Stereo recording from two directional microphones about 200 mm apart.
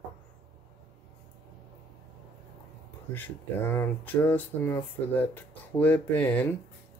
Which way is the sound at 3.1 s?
10° left (ahead or behind).